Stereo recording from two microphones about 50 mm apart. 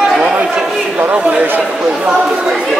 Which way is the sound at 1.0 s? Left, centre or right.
Right.